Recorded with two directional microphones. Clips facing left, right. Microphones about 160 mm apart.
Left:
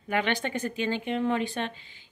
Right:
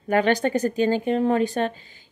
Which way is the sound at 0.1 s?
40° right (ahead or behind).